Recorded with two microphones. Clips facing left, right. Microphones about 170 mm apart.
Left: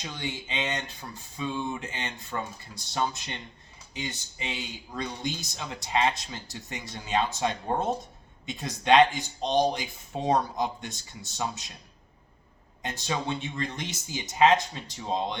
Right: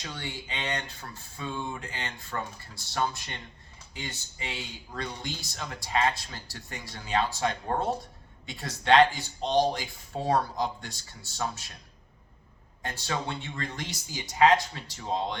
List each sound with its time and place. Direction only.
0.0 s speech: 20° left (ahead or behind)
12.8 s speech: 20° left (ahead or behind)